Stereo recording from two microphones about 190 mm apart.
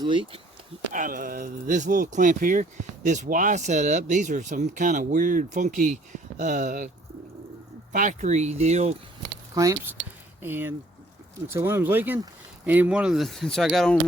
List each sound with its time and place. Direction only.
0.0 s speech: 25° right (ahead or behind)
0.9 s speech: 45° right (ahead or behind)
7.9 s speech: 40° right (ahead or behind)
9.6 s speech: 15° right (ahead or behind); by 14.0 s centre (ahead or behind)